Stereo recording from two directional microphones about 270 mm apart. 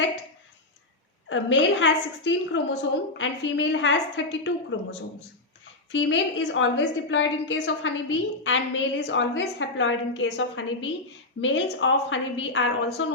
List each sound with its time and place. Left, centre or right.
1.3 s a woman's voice: left